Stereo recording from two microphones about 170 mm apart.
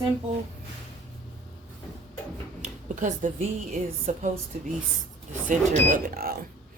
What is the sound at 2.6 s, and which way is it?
Speech, 45° right (ahead or behind).